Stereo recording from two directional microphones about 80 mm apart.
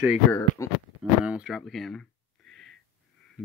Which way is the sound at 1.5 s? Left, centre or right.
Centre.